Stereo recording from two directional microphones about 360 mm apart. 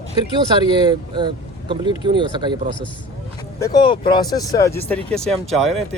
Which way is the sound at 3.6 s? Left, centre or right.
Centre.